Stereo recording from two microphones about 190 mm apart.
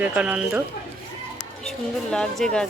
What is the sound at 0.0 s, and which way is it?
Speech, 5° right (ahead or behind).